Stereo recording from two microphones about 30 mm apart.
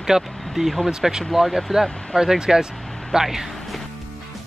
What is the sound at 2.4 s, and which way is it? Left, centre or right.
Speech, right.